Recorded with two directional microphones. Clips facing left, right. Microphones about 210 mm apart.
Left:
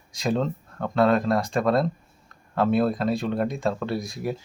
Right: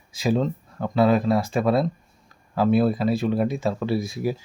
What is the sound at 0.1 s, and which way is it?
Speech, 5° right (ahead or behind).